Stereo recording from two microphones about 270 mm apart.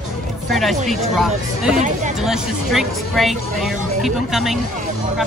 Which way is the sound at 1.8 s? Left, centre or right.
Right.